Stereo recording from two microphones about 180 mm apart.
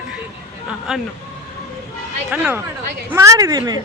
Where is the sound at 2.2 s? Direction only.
10° right (ahead or behind).